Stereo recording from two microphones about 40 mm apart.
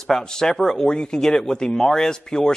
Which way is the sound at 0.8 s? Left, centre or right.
Left.